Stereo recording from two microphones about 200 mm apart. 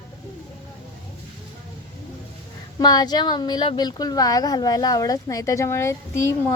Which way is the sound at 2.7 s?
20° left (ahead or behind).